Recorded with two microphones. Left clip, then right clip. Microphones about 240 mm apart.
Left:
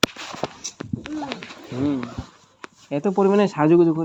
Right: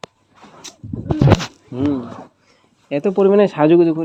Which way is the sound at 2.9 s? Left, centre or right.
Centre.